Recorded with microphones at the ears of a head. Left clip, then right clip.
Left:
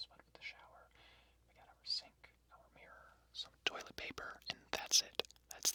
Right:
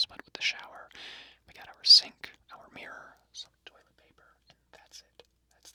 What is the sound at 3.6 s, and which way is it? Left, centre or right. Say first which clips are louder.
Whispering: left 13 dB; left.